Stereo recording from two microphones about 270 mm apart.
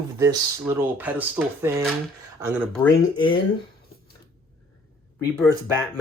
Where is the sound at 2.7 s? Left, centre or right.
Centre.